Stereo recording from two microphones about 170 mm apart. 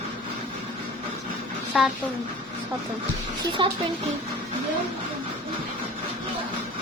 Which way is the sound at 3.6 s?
30° right (ahead or behind).